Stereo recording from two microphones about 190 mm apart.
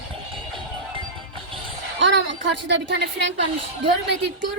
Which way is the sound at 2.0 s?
70° right (ahead or behind).